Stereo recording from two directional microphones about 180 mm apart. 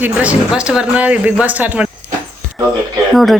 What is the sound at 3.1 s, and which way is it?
Speech, centre (ahead or behind).